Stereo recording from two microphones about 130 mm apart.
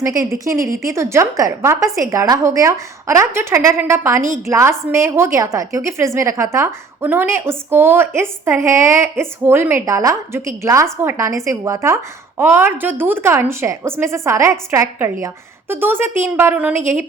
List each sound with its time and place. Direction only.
0.0 s a woman's voice: 25° right (ahead or behind)